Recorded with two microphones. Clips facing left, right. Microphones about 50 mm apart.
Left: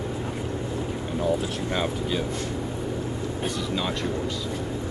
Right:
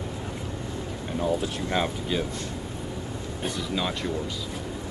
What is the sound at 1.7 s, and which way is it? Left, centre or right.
Speech, centre.